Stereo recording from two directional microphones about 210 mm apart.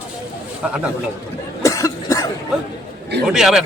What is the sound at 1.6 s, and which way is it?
Cough, 15° left (ahead or behind).